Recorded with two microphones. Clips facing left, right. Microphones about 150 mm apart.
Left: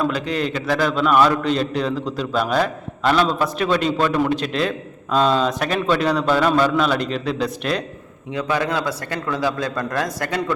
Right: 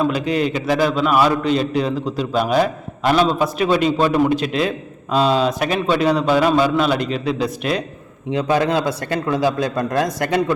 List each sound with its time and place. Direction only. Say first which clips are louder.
0.1 s a man's voice: right 3 dB; 10° right (ahead or behind)
8.3 s a man's voice: right 4 dB; 30° right (ahead or behind)